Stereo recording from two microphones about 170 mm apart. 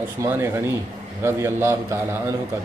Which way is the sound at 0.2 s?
15° right (ahead or behind).